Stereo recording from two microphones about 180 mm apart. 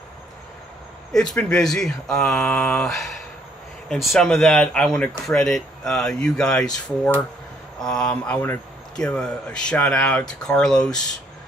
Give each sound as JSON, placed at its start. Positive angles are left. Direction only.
{"t": 1.1, "sound": "a man's voice", "side_deg": 5}
{"t": 7.8, "sound": "a man's voice", "side_deg": 5}